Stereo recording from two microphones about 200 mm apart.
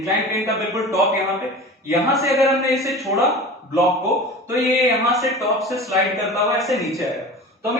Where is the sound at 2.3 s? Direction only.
Centre (ahead or behind).